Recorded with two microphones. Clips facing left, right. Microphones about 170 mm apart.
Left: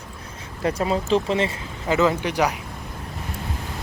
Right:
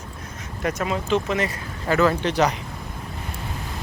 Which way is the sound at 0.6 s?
30° left (ahead or behind).